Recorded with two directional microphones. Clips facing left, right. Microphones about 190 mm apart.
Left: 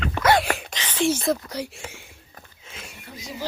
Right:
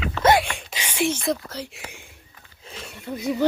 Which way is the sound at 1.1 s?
Centre (ahead or behind).